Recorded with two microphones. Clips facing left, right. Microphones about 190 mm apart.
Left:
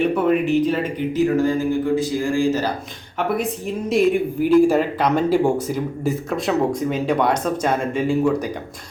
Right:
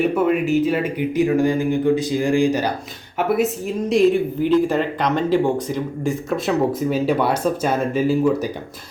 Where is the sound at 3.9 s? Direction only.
5° left (ahead or behind).